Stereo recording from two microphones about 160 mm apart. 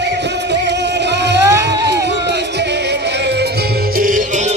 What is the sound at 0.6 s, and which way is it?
Music, 90° right.